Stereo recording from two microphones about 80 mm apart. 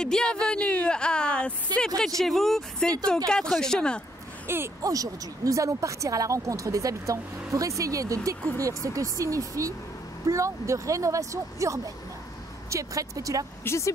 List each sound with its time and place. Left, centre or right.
0.0 s speech: centre
4.5 s speech: right
4.8 s speech: right
13.7 s speech: left